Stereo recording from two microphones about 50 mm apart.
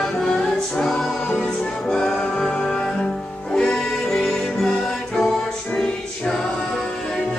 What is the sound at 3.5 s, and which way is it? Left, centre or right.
Music, centre.